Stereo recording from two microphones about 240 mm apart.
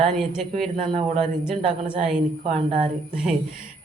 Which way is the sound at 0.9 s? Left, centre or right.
Right.